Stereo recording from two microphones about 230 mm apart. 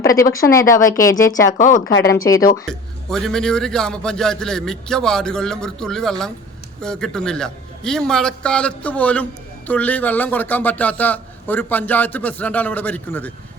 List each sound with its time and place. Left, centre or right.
0.0 s a man's voice: centre
1.5 s speech: left
2.6 s a man's voice: centre